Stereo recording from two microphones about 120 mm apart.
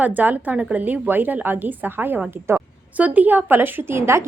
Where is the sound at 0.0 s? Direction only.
15° right (ahead or behind).